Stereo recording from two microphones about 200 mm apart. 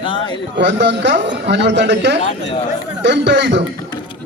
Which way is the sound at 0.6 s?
60° right (ahead or behind).